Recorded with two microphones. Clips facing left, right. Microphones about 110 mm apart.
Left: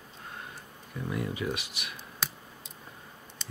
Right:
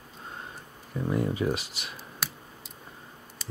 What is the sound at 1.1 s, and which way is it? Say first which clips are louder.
Speech: right 5 dB; 35° right (ahead or behind).